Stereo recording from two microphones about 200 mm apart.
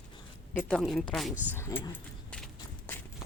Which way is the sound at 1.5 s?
10° left (ahead or behind).